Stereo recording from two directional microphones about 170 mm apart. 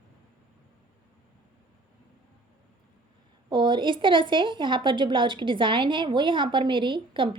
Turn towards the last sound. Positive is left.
turn(degrees=-30)  # may be behind; listen again after turning